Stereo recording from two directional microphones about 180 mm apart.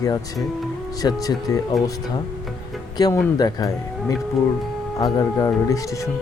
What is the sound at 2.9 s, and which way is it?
A man's voice, 20° left (ahead or behind).